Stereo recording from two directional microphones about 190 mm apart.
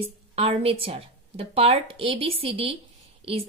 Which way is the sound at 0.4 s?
30° right (ahead or behind).